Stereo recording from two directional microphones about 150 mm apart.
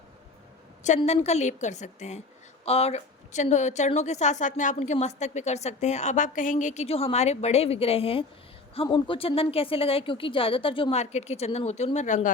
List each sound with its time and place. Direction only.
1.0 s a woman's voice: 45° left (ahead or behind)
11.0 s a woman's voice: 50° left (ahead or behind)